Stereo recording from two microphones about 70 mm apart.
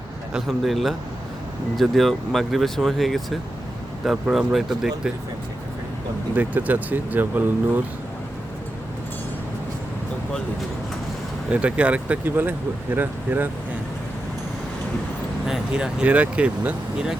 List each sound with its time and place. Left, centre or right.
0.4 s speech: centre
6.3 s speech: right
11.4 s speech: centre
12.4 s speech: right
15.4 s speech: centre